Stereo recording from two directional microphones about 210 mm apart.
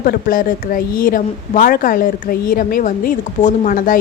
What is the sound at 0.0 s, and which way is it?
Speech, 45° left (ahead or behind).